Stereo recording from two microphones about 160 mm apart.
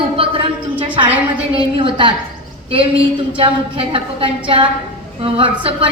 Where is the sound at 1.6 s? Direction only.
35° right (ahead or behind).